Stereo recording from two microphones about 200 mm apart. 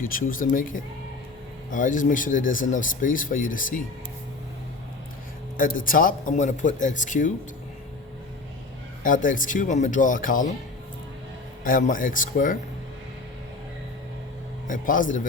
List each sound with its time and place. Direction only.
0.0 s speech: 45° left (ahead or behind)
5.5 s speech: 45° left (ahead or behind)
9.0 s speech: 40° left (ahead or behind)
11.6 s speech: 40° left (ahead or behind)
14.7 s speech: 40° left (ahead or behind)